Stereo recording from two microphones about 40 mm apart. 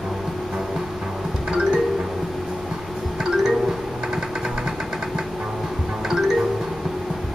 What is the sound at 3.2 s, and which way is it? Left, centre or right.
Music, centre.